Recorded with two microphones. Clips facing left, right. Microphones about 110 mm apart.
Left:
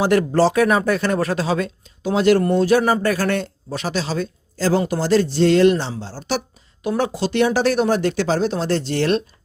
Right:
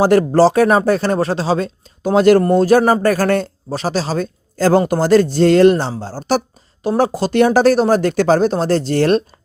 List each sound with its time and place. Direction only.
0.0 s speech: 40° right (ahead or behind)
2.0 s a man's voice: 45° right (ahead or behind)